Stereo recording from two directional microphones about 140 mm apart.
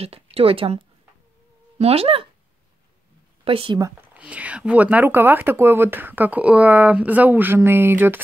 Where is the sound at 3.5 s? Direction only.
40° right (ahead or behind).